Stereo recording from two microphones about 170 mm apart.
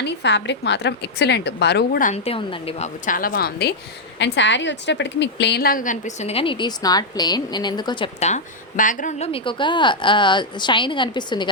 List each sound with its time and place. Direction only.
0.0 s a woman's voice: 90° left
2.0 s a woman's voice: 45° left (ahead or behind)
3.1 s a woman's voice: 55° left (ahead or behind)
4.2 s a woman's voice: 90° left; by 6.3 s 50° left (ahead or behind)
6.3 s a woman's voice: 30° left (ahead or behind)
8.2 s speech: 45° left (ahead or behind)
9.3 s a woman's voice: 30° left (ahead or behind)